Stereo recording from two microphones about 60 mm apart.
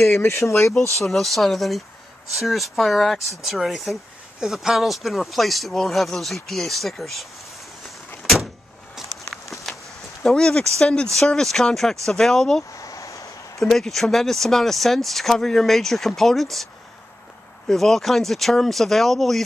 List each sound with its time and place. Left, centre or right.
0.1 s speech: left
0.9 s speech: centre
8.2 s vehicle: centre
8.9 s a sound: centre
10.2 s speech: centre
12.7 s a sound: left
13.6 s speech: centre
17.6 s speech: centre